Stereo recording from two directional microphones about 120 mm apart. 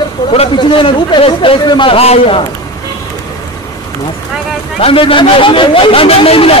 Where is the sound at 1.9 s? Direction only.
55° left (ahead or behind).